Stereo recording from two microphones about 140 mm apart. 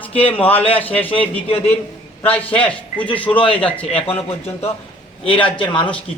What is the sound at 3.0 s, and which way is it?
Speech, 35° left (ahead or behind).